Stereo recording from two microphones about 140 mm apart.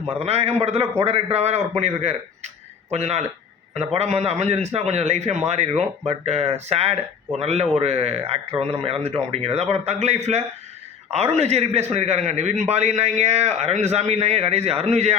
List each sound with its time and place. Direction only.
0.2 s speech: 45° right (ahead or behind)